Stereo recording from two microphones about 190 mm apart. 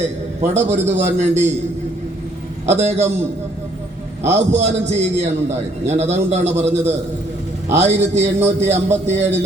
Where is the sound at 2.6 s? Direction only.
35° right (ahead or behind).